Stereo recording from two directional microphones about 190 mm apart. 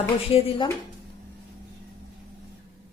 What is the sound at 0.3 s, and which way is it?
Speech, 30° left (ahead or behind).